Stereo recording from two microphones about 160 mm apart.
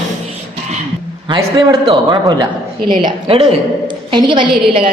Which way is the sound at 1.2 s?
30° right (ahead or behind).